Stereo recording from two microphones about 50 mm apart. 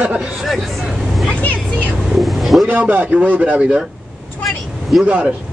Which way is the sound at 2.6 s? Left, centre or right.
Right.